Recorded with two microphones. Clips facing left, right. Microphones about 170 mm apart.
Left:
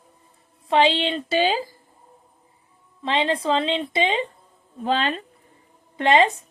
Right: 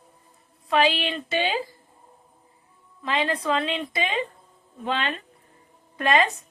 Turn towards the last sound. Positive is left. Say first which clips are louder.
# left 4 dB
turn(degrees=25)  # may be behind; listen again after turning